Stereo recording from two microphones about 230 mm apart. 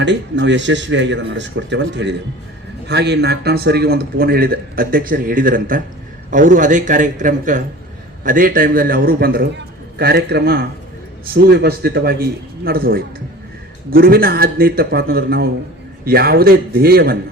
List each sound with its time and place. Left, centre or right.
0.0 s a man's voice: right